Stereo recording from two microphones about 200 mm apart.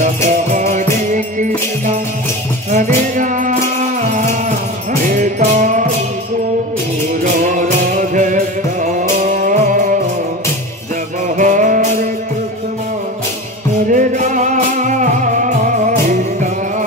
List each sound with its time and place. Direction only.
0.0 s music: 40° right (ahead or behind)
2.7 s music: 40° right (ahead or behind)
7.3 s music: 40° right (ahead or behind)
11.3 s music: 40° right (ahead or behind)
13.9 s music: 40° right (ahead or behind)